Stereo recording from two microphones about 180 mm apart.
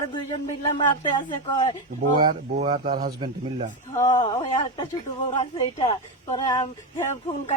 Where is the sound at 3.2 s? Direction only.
35° right (ahead or behind).